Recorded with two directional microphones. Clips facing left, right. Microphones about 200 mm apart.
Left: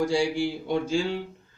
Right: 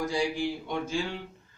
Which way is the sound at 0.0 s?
30° left (ahead or behind).